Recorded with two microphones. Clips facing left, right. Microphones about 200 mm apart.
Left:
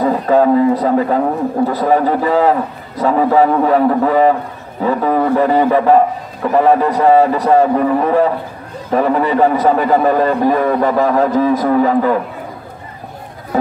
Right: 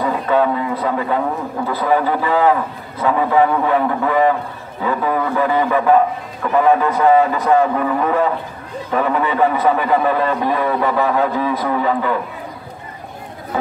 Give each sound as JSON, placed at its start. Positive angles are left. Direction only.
{"t": 0.0, "sound": "a man's voice", "side_deg": 40}